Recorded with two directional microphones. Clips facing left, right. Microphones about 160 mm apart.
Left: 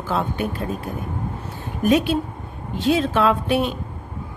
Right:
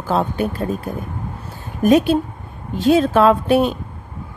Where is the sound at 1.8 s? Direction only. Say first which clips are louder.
Right 5 dB; 40° right (ahead or behind).